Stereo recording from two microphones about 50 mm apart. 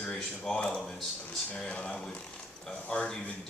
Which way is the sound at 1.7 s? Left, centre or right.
Left.